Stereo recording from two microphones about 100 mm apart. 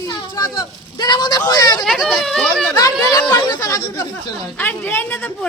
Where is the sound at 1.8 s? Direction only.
Centre (ahead or behind).